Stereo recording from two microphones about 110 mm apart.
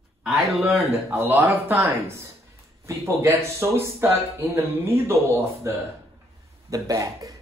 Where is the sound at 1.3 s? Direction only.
20° right (ahead or behind).